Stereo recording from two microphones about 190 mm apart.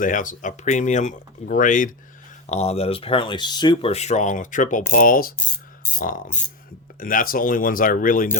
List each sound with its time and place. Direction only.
0.0 s speech: 45° left (ahead or behind)